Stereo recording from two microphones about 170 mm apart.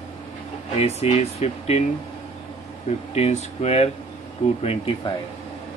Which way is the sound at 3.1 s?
40° left (ahead or behind).